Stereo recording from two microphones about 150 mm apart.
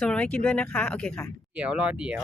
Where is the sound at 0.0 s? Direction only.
10° left (ahead or behind).